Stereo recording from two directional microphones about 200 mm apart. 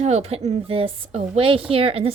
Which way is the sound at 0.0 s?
30° right (ahead or behind).